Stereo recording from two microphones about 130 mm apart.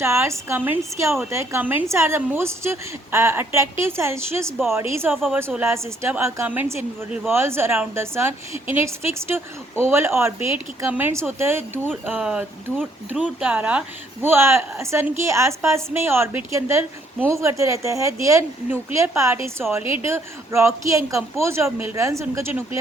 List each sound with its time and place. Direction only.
0.0 s a woman's voice: 20° right (ahead or behind)
19.8 s a woman's voice: 45° left (ahead or behind)
20.1 s a woman's voice: 20° right (ahead or behind)